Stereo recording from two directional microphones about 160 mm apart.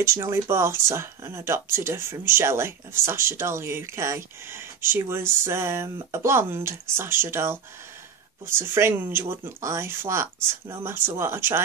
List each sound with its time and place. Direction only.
0.0 s speech: 15° right (ahead or behind)